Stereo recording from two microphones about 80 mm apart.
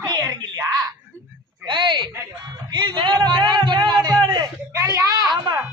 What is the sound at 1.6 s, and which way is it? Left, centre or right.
Speech, right.